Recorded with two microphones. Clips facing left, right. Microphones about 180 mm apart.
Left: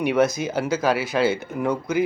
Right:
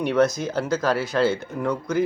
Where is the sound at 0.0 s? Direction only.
5° left (ahead or behind).